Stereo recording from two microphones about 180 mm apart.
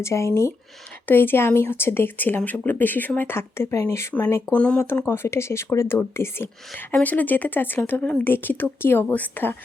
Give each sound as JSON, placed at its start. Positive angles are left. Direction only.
{"t": 0.0, "sound": "speech", "side_deg": 15}